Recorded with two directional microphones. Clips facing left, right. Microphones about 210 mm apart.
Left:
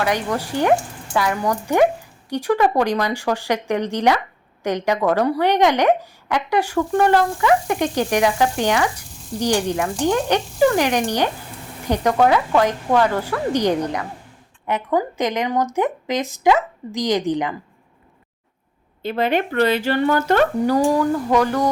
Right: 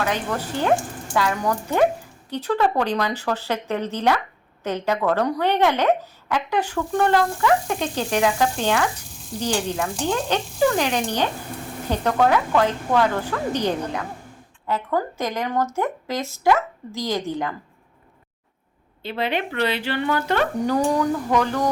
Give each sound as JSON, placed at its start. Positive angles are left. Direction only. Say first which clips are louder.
{"t": 0.0, "sound": "a woman's voice", "louder": "left 3 dB", "side_deg": 10}
{"t": 19.0, "sound": "speech", "louder": "left 5 dB", "side_deg": 45}
{"t": 20.7, "sound": "a woman's voice", "louder": "left 3 dB", "side_deg": 5}